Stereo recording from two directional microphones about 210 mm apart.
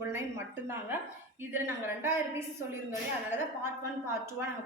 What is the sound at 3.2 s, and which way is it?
Speech, 10° right (ahead or behind).